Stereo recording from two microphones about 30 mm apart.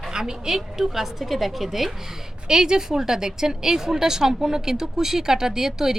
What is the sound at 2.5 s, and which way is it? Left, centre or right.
A woman's voice, right.